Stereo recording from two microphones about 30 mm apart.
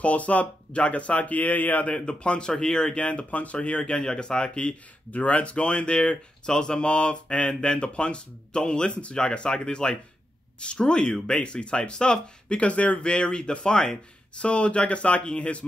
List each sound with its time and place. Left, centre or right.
0.0 s speech: left
1.9 s speech: left
3.0 s speech: left
3.5 s speech: left
4.0 s speech: left
5.1 s speech: left
12.5 s speech: left
13.0 s speech: left